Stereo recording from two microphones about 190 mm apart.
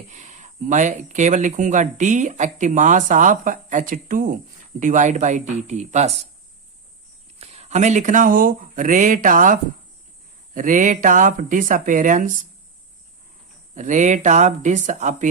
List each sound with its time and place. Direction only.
0.1 s speech: 40° right (ahead or behind)
7.3 s speech: 35° right (ahead or behind)
13.7 s speech: 40° right (ahead or behind)